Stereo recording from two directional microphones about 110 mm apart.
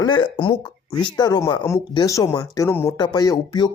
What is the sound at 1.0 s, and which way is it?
Speech, 40° left (ahead or behind).